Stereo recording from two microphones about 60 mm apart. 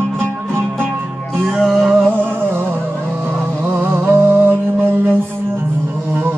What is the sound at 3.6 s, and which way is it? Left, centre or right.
Mantra, right.